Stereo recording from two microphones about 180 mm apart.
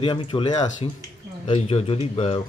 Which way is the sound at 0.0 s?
30° left (ahead or behind).